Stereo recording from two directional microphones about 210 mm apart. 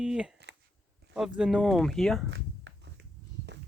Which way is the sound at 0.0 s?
5° right (ahead or behind).